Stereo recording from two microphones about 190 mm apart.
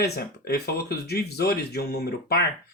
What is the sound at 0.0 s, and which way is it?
Speech, 60° left (ahead or behind).